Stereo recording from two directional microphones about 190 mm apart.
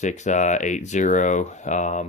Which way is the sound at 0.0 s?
40° left (ahead or behind).